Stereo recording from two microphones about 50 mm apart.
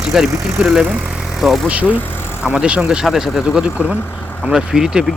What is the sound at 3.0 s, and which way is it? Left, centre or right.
Speech, centre.